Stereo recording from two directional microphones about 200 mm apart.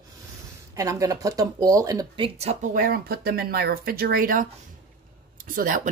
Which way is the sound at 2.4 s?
35° right (ahead or behind).